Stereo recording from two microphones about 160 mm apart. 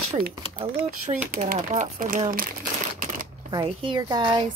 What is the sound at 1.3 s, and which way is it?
Speech, 60° right (ahead or behind).